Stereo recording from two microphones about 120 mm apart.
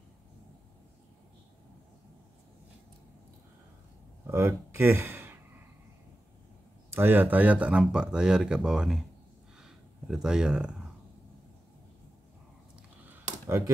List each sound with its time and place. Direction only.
4.3 s speech: 20° right (ahead or behind)
6.9 s speech: 15° right (ahead or behind)
13.0 s computer keyboard: 15° right (ahead or behind)